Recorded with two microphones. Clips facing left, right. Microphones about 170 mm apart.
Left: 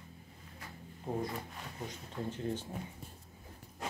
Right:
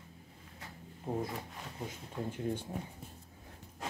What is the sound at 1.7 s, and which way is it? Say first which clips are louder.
Speech: right 1 dB; 10° right (ahead or behind).